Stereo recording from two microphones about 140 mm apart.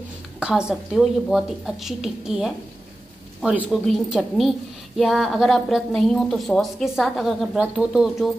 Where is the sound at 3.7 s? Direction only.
Centre (ahead or behind).